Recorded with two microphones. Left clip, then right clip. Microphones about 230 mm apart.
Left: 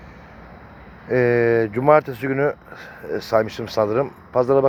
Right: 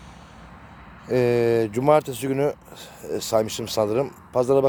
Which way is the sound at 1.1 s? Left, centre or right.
Centre.